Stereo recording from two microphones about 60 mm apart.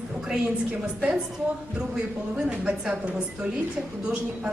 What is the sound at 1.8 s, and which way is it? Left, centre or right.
A woman's voice, centre.